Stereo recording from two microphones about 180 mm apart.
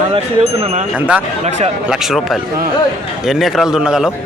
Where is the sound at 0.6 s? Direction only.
35° right (ahead or behind).